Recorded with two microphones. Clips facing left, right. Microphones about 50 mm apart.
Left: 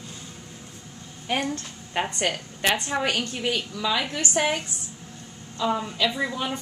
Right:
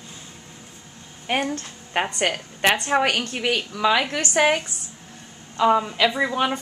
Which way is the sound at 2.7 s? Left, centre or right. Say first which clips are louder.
Right 4 dB; right.